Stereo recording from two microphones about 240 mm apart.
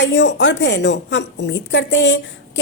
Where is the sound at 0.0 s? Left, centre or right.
Left.